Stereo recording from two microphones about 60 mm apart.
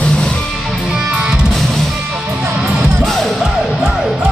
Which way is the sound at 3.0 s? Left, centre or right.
Centre.